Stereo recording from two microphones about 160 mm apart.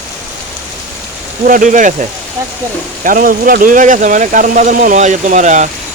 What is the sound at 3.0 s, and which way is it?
Speech, 60° right (ahead or behind).